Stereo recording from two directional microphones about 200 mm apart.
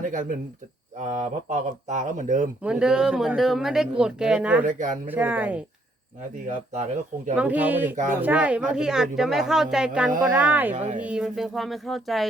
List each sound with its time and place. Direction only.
0.0 s speech: 40° right (ahead or behind)
2.6 s speech: 5° right (ahead or behind)
4.6 s speech: 40° right (ahead or behind)
5.0 s speech: 10° right (ahead or behind)
7.3 s speech: 5° right (ahead or behind)
10.8 s speech: 40° right (ahead or behind)
11.0 s speech: 5° right (ahead or behind)